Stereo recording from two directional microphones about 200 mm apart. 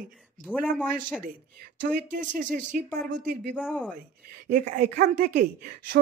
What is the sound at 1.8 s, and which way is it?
Speech, 45° right (ahead or behind).